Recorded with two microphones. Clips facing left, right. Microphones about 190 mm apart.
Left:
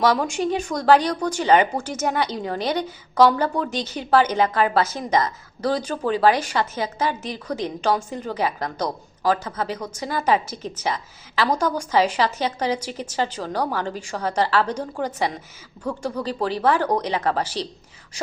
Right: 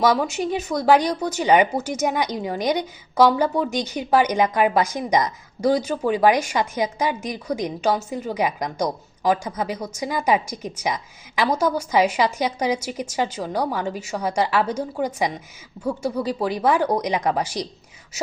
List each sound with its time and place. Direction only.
0.0 s a woman's voice: 10° right (ahead or behind)